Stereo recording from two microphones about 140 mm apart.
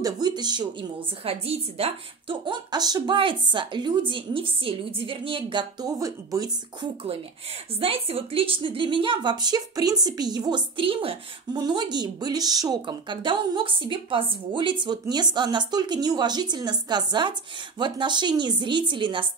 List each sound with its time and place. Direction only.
0.0 s a woman's voice: 30° right (ahead or behind)
7.8 s a woman's voice: 45° right (ahead or behind)